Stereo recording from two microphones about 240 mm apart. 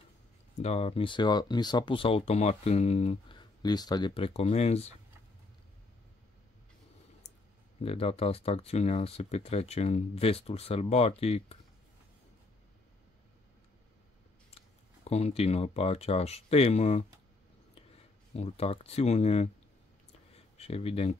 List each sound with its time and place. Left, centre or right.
0.6 s speech: left
7.8 s speech: left
15.0 s speech: left
18.3 s speech: left
20.3 s a sound: left